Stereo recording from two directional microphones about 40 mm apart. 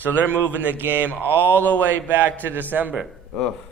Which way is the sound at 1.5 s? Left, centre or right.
Left.